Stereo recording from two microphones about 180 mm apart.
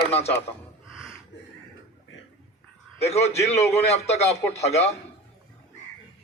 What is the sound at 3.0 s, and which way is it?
Speech, 35° left (ahead or behind).